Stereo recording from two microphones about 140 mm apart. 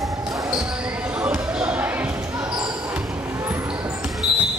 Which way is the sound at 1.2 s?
10° right (ahead or behind).